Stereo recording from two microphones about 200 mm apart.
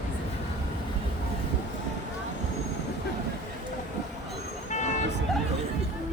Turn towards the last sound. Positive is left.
turn(degrees=35)  # may be behind; listen again after turning